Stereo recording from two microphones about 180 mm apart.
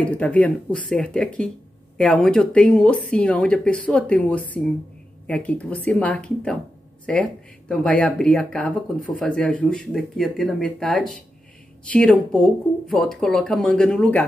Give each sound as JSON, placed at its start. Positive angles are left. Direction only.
{"t": 0.0, "sound": "speech", "side_deg": 5}